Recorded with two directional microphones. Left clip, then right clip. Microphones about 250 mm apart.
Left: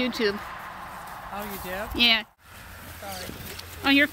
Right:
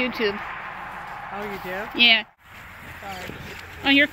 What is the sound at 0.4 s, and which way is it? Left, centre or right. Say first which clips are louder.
Vehicle: right 4 dB; left.